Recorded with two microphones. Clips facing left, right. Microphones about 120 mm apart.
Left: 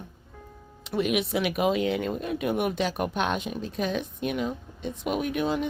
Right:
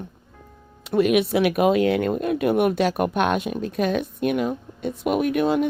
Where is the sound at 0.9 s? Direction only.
60° right (ahead or behind).